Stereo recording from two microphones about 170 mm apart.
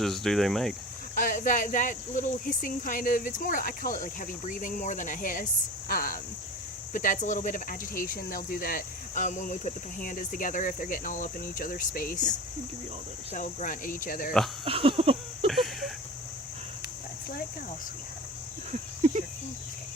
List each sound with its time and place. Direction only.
0.0 s speech: centre (ahead or behind)
1.1 s speech: 50° left (ahead or behind)
13.3 s speech: 45° left (ahead or behind)
14.6 s a sound: 30° right (ahead or behind)
15.4 s a sound: centre (ahead or behind)
18.7 s cricket: 45° right (ahead or behind)